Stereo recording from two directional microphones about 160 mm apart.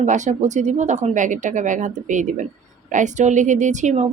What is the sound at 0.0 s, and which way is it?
Speech, 50° right (ahead or behind).